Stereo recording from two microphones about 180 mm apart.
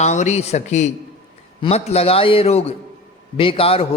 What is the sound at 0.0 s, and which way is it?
Speech, 40° left (ahead or behind).